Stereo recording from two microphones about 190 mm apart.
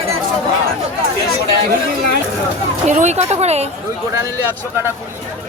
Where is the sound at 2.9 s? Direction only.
40° right (ahead or behind).